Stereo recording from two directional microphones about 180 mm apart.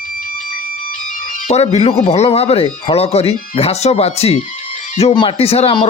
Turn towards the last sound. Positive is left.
turn(degrees=30)  # may be behind; listen again after turning